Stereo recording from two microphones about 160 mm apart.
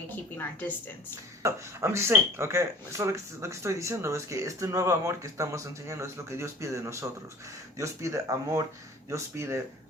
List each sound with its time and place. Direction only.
1.5 s speech: 15° right (ahead or behind)